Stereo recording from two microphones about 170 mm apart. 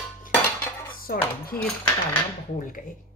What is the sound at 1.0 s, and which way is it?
Speech, 60° left (ahead or behind).